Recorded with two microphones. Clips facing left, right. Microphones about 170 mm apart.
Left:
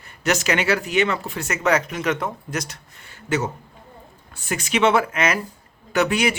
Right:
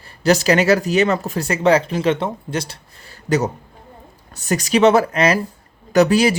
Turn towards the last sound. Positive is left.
turn(degrees=-35)  # may be behind; listen again after turning